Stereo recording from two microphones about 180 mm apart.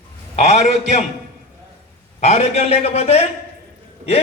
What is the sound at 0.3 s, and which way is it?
Speech, 40° left (ahead or behind).